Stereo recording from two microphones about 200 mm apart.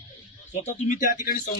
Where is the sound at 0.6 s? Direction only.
35° left (ahead or behind).